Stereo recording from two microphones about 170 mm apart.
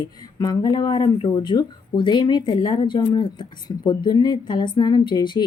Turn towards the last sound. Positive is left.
turn(degrees=25)  # may be behind; listen again after turning